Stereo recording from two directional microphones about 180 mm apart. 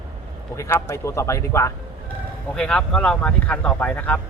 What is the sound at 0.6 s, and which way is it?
Speech, 15° left (ahead or behind).